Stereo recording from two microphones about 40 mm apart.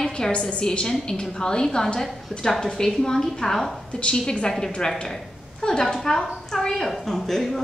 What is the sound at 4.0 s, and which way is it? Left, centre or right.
A woman's voice, left.